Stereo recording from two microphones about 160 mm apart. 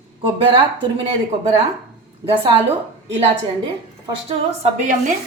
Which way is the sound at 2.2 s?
20° right (ahead or behind).